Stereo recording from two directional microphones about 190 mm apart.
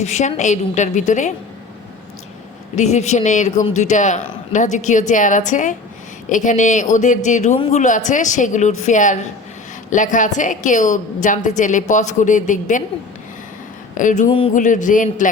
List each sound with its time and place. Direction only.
0.0 s a man's voice: 35° left (ahead or behind)
2.7 s a man's voice: 35° left (ahead or behind)
13.9 s speech: 40° left (ahead or behind)
14.3 s speech: 30° left (ahead or behind)
14.5 s a man's voice: 40° left (ahead or behind)